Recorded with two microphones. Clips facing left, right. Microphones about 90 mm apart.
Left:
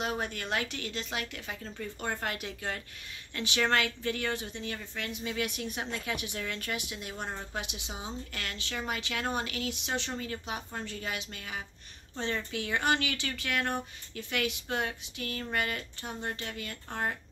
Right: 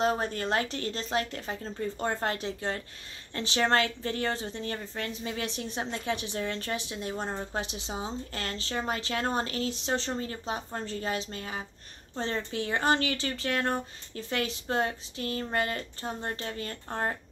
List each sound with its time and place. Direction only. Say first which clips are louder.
0.0 s speech: right 6 dB; 35° right (ahead or behind)